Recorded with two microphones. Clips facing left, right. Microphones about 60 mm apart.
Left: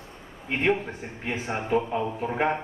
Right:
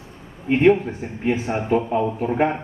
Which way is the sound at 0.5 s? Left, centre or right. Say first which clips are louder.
Right 9 dB; centre.